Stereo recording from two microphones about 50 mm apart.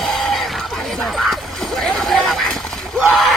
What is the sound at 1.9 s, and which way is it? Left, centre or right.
Speech, centre.